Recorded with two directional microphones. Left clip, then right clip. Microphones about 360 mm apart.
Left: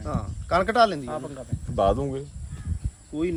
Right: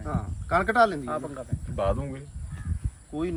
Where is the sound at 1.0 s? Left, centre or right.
Centre.